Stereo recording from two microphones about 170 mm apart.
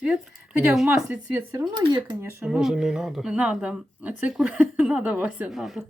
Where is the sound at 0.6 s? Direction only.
5° right (ahead or behind).